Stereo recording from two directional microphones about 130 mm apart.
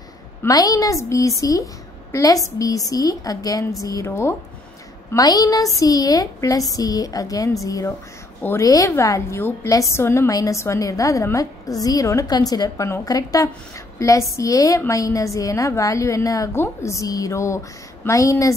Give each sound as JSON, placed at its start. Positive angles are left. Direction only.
{"t": 0.4, "sound": "a woman's voice", "side_deg": 25}